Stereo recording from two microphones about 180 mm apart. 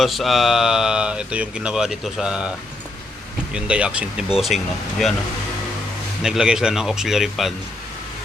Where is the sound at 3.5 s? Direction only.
5° right (ahead or behind).